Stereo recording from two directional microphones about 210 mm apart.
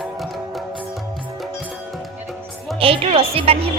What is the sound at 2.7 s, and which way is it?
Speech, 25° right (ahead or behind).